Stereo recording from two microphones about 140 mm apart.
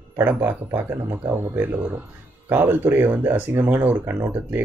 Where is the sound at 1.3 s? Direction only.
15° right (ahead or behind).